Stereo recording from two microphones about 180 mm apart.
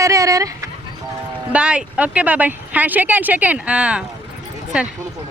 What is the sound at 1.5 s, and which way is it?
Speech, 5° right (ahead or behind).